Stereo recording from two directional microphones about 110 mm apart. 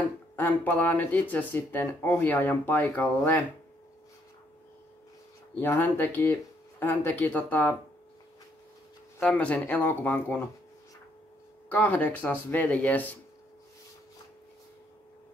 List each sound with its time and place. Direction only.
0.0 s speech: 15° left (ahead or behind)
5.6 s speech: 20° left (ahead or behind)
9.2 s speech: 10° left (ahead or behind)
11.7 s speech: 15° left (ahead or behind)